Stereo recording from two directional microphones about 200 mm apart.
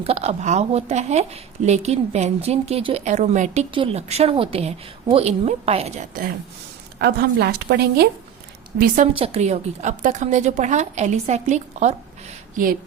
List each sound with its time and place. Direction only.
0.0 s a woman's voice: 30° right (ahead or behind)
7.0 s a woman's voice: 55° right (ahead or behind)
9.1 s a woman's voice: 30° right (ahead or behind)